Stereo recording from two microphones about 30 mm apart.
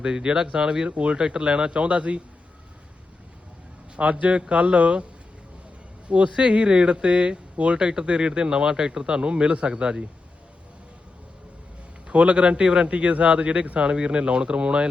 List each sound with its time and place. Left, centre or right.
0.0 s a man's voice: right
0.9 s a man's voice: right
1.1 s a man's voice: right
1.7 s a man's voice: right
3.9 s a man's voice: right
6.1 s a man's voice: right
12.0 s a man's voice: right